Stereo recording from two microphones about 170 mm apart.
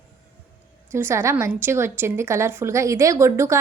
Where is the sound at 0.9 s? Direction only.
15° right (ahead or behind).